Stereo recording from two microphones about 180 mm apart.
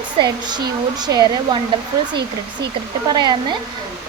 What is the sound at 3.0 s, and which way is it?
Speech, 25° right (ahead or behind).